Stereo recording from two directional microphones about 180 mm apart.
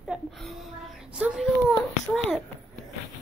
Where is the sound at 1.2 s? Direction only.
5° right (ahead or behind).